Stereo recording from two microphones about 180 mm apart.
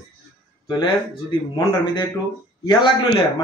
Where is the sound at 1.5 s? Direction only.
20° left (ahead or behind).